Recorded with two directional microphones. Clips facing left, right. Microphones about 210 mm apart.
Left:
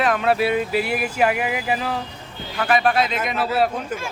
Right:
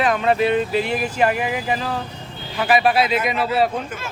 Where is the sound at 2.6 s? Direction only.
5° right (ahead or behind).